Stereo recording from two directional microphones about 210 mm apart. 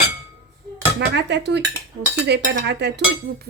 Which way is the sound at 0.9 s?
55° right (ahead or behind).